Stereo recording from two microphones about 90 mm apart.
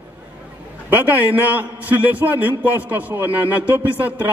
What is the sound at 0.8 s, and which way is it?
A man's voice, 20° right (ahead or behind).